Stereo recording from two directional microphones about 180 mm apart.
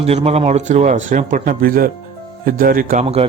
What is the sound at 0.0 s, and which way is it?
Speech, 35° right (ahead or behind).